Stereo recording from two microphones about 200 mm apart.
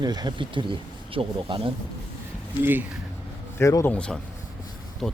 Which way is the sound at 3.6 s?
15° left (ahead or behind).